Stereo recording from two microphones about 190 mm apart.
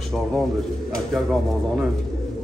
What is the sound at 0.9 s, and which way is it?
Speech, centre (ahead or behind).